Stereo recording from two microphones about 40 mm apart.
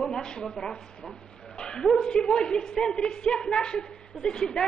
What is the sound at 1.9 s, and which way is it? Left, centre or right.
A woman's voice, centre.